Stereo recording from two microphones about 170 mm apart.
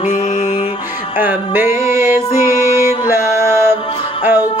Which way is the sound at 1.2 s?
10° right (ahead or behind).